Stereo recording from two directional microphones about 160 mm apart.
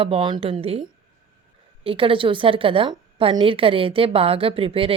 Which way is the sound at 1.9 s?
35° right (ahead or behind).